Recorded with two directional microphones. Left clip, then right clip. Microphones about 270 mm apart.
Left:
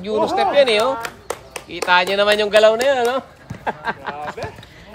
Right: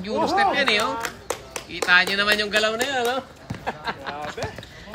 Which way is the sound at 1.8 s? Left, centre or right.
Centre.